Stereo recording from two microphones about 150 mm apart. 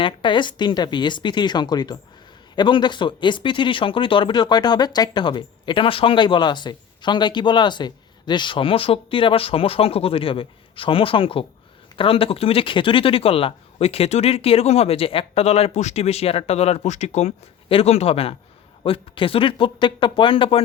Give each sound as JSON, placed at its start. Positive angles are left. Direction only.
{"t": 0.0, "sound": "speech", "side_deg": 30}